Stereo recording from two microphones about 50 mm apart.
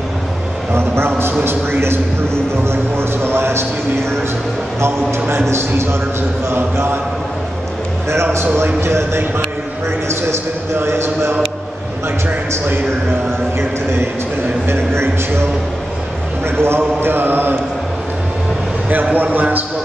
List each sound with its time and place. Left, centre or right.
0.7 s a man's voice: right
5.5 s a man's voice: right
8.1 s a man's voice: right
14.7 s a man's voice: right
16.4 s a man's voice: right
19.1 s a man's voice: right